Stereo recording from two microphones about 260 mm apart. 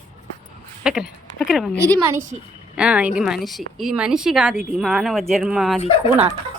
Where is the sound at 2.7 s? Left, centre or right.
Centre.